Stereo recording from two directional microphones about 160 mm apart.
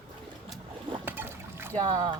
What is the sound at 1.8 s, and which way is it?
Boat, 25° right (ahead or behind).